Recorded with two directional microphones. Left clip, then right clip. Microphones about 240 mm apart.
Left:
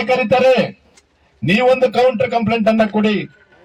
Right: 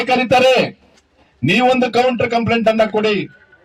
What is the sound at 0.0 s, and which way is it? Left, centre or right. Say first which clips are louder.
Speech: right 1 dB; right.